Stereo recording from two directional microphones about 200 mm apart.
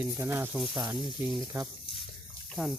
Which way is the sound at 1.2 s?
15° right (ahead or behind).